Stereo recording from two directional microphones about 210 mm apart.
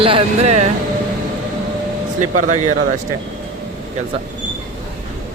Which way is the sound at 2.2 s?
35° right (ahead or behind).